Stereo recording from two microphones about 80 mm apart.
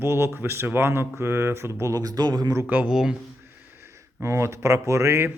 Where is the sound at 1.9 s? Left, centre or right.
Right.